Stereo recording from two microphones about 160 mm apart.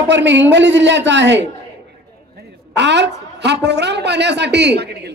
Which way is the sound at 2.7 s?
90° right.